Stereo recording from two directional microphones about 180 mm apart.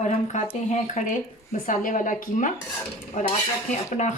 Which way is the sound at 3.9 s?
40° left (ahead or behind).